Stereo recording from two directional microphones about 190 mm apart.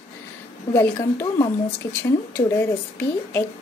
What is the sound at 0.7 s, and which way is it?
Speech, 15° left (ahead or behind).